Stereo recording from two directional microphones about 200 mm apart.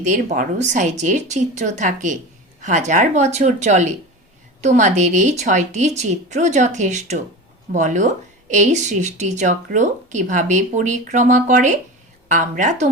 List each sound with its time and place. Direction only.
0.0 s a woman's voice: 35° right (ahead or behind)